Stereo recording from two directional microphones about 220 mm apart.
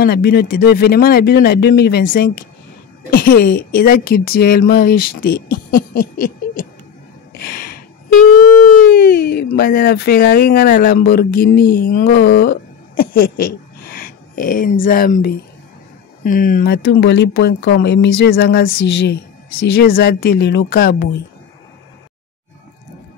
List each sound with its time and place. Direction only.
0.0 s speech: 45° left (ahead or behind)
7.3 s a sound: 40° left (ahead or behind)
16.3 s speech: 40° left (ahead or behind)